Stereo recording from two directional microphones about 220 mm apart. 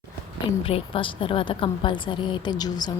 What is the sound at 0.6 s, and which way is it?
A woman's voice, 25° left (ahead or behind).